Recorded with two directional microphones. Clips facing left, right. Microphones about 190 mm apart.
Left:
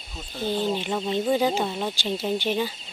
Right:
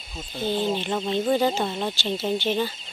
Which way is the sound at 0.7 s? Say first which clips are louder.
Right 1 dB; 5° left (ahead or behind).